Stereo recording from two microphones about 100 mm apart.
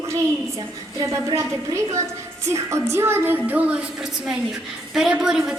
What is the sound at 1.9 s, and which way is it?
Speech, 30° right (ahead or behind).